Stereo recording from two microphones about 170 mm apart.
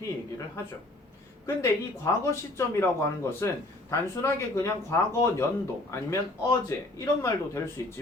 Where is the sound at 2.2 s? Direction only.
15° left (ahead or behind).